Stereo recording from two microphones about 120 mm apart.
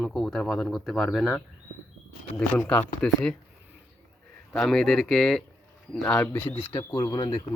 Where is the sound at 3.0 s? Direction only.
10° left (ahead or behind).